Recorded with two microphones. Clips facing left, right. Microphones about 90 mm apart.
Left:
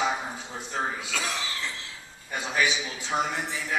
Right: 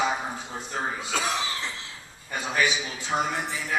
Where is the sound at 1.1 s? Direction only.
20° right (ahead or behind).